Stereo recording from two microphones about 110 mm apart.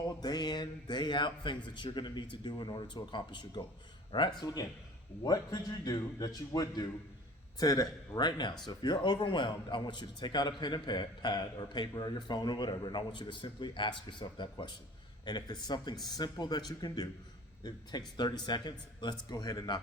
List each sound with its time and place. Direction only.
0.2 s a man's voice: 40° left (ahead or behind)